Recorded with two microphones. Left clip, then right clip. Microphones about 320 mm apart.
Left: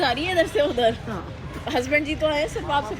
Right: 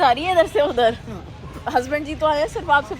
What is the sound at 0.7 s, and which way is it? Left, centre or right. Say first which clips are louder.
Speech: right 3 dB; centre.